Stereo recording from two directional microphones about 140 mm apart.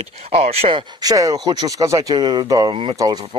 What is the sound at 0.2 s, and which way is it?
Speech, 45° right (ahead or behind).